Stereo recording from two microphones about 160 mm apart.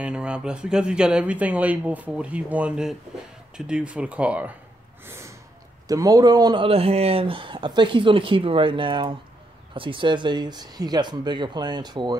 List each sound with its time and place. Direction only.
0.0 s speech: 5° right (ahead or behind)
5.0 s snort: 15° right (ahead or behind)
5.9 s speech: 20° right (ahead or behind)